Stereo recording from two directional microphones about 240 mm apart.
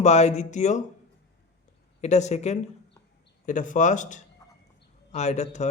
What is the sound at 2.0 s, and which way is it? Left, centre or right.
Speech, left.